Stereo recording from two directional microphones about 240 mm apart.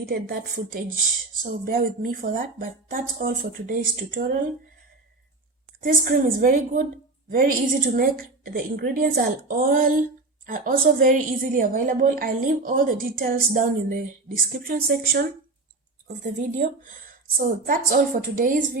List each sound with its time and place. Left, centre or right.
0.0 s a woman's voice: right
5.8 s a woman's voice: right
7.9 s a woman's voice: right